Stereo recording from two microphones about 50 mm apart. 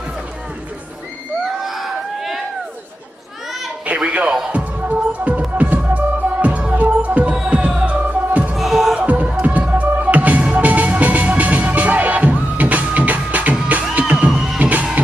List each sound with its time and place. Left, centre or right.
1.6 s a sound: centre
3.8 s a sound: right
4.5 s music: right
8.5 s music: centre
8.9 s music: right
14.6 s music: right